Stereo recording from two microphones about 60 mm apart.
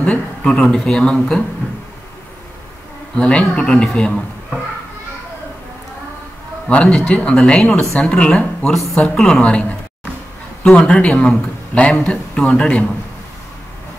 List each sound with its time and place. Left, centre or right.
0.0 s speech: centre
1.6 s a sound: left
3.2 s speech: centre
6.7 s speech: centre
8.7 s a man's voice: centre